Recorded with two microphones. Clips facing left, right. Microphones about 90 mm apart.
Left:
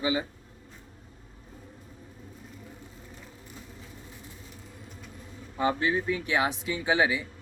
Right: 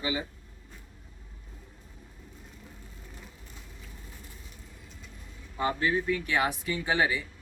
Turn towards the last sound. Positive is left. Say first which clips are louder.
# left 2 dB
turn(degrees=15)  # may be behind; listen again after turning